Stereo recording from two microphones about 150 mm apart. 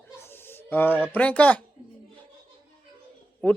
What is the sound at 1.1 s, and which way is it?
Speech, 10° left (ahead or behind).